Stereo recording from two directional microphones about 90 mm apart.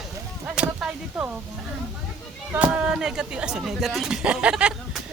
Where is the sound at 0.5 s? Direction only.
10° right (ahead or behind).